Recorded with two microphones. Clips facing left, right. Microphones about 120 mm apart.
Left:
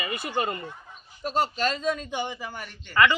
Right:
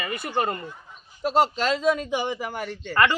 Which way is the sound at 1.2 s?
90° right.